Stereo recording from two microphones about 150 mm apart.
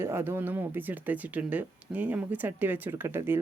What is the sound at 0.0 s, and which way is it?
Speech, 15° right (ahead or behind).